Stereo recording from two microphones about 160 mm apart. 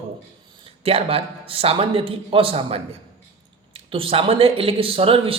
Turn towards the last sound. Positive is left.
turn(degrees=-35)  # may be behind; listen again after turning